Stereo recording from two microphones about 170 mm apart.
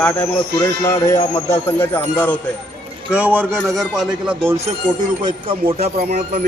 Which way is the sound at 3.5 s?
Centre (ahead or behind).